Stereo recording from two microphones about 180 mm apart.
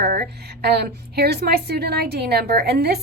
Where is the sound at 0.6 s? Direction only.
60° right (ahead or behind).